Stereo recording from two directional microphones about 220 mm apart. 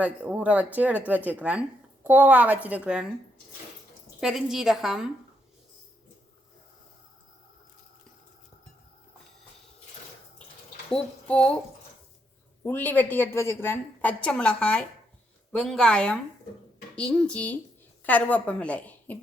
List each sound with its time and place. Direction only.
0.0 s speech: 5° right (ahead or behind)
4.2 s a woman's voice: centre (ahead or behind)
10.9 s speech: 5° left (ahead or behind)
12.6 s a woman's voice: 10° left (ahead or behind)